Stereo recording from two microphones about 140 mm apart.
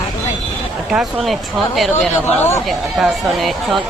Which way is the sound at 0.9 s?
Centre (ahead or behind).